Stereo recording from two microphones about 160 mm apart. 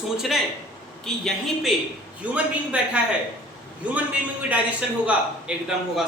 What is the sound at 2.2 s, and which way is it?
Speech, 10° right (ahead or behind).